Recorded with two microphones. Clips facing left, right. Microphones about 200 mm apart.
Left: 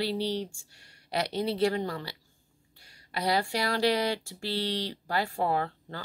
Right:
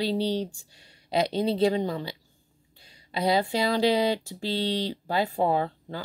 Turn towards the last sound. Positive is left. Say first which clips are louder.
# right 4 dB
turn(degrees=-15)  # may be behind; listen again after turning